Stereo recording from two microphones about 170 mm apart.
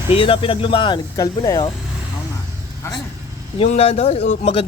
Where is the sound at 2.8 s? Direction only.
15° left (ahead or behind).